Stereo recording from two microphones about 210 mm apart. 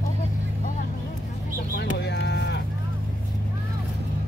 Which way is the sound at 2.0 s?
55° left (ahead or behind).